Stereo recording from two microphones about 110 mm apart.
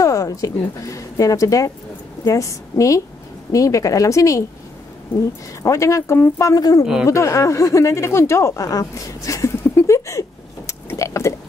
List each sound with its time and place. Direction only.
0.0 s a woman's voice: 30° left (ahead or behind)
5.6 s speech: 25° left (ahead or behind)
10.7 s a sound: 25° left (ahead or behind)